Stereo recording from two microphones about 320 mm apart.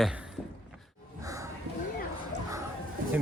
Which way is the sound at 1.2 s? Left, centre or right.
Centre.